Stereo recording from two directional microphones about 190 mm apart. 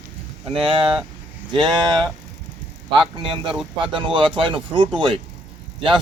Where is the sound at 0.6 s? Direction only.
30° right (ahead or behind).